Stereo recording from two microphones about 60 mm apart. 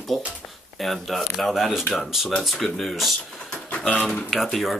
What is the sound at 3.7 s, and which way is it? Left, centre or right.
Speech, left.